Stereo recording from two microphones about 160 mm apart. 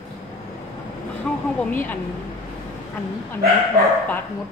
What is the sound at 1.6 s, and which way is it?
Speech, 10° left (ahead or behind).